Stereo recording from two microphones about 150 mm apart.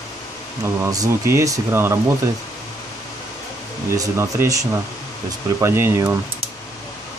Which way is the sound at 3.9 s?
20° right (ahead or behind).